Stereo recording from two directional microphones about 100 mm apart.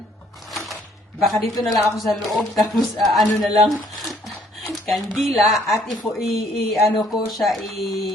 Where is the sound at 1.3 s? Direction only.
Centre (ahead or behind).